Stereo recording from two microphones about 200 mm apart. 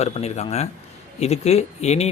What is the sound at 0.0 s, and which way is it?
Speech, 30° left (ahead or behind).